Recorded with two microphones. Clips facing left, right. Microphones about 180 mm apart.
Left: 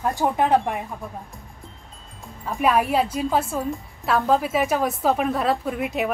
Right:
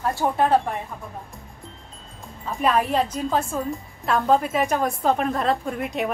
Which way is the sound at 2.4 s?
10° left (ahead or behind).